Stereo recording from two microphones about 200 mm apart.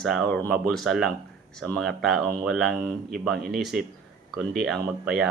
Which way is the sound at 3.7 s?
5° right (ahead or behind).